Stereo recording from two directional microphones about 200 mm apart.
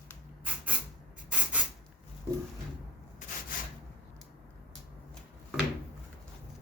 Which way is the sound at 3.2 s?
35° left (ahead or behind).